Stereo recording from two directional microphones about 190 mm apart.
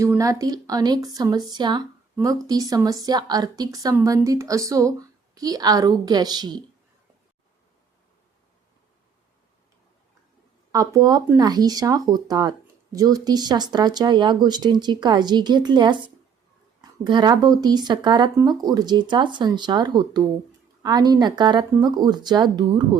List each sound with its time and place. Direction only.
0.0 s speech: 15° right (ahead or behind)
10.7 s speech: 20° right (ahead or behind)